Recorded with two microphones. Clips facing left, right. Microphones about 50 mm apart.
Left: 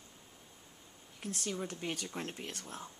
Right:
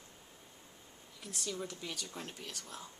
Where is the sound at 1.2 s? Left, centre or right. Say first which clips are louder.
Left 3 dB; left.